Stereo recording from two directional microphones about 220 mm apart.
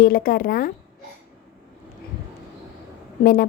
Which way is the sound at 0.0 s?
40° left (ahead or behind).